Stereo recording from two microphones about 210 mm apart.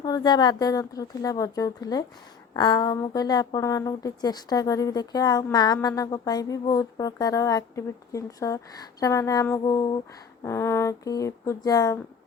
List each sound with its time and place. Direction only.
0.0 s speech: 20° left (ahead or behind)